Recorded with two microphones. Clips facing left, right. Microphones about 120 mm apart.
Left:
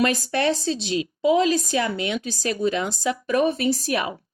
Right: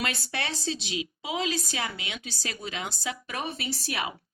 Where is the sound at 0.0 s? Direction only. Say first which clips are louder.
Left 11 dB; 45° left (ahead or behind).